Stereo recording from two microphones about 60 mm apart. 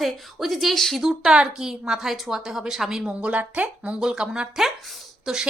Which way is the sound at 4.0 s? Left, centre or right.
Centre.